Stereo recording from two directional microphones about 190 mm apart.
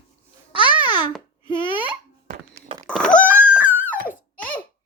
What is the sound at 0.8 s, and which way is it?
Babbling, 25° left (ahead or behind).